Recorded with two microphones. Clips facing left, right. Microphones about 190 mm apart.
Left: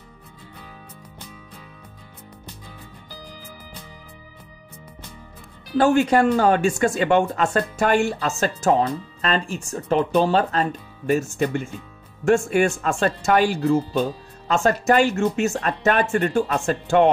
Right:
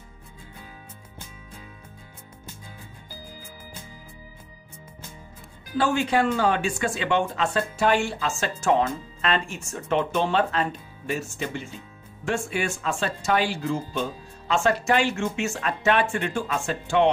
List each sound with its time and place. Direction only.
5.8 s speech: 45° left (ahead or behind)